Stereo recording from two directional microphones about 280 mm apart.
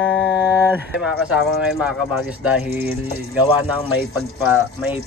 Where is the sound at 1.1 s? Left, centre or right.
Centre.